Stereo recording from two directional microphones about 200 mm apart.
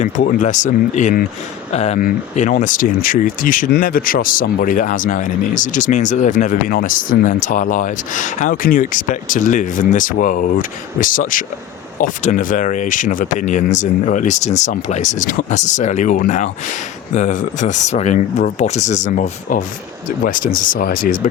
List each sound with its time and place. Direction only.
0.0 s speech: 35° left (ahead or behind)